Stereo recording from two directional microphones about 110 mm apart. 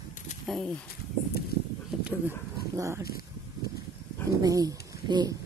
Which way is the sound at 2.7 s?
25° right (ahead or behind).